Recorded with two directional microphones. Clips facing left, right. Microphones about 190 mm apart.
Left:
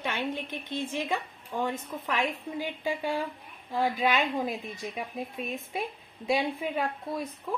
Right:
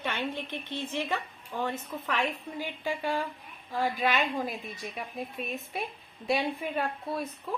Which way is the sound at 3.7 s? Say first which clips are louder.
Left 2 dB; 20° left (ahead or behind).